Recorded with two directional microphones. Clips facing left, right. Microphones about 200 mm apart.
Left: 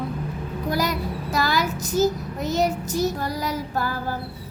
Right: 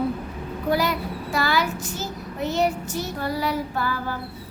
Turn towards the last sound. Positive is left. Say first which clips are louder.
# left 1 dB
turn(degrees=40)  # may be behind; listen again after turning